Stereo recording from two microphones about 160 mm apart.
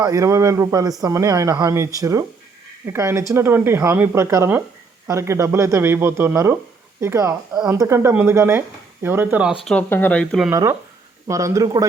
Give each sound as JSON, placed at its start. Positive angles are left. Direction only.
{"t": 0.0, "sound": "speech", "side_deg": -20}
{"t": 9.6, "sound": "speech", "side_deg": 10}
{"t": 10.5, "sound": "speech", "side_deg": -20}